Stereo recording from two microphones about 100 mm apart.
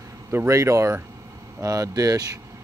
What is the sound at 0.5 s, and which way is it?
Speech, 30° right (ahead or behind).